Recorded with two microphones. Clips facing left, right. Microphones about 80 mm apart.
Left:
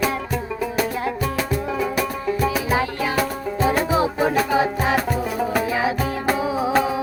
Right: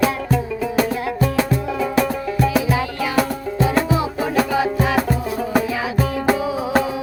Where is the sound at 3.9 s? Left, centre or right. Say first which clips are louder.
Left 1 dB; left.